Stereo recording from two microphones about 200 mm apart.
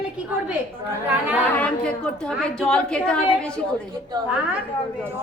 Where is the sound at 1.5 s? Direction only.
5° left (ahead or behind).